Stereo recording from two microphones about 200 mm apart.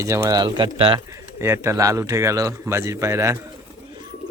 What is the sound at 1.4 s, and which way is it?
Speech, 10° right (ahead or behind).